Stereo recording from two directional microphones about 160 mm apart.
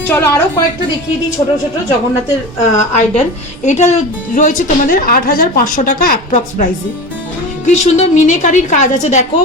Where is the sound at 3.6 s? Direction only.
45° left (ahead or behind).